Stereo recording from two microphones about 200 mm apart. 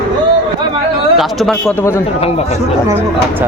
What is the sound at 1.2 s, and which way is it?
Speech, centre (ahead or behind).